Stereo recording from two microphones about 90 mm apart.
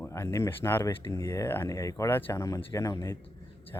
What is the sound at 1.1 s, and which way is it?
Speech, 35° left (ahead or behind).